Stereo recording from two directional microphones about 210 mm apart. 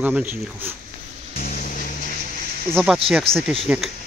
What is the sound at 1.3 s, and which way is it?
Vehicle, 40° left (ahead or behind).